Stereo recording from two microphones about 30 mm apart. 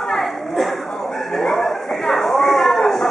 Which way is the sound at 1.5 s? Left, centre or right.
Centre.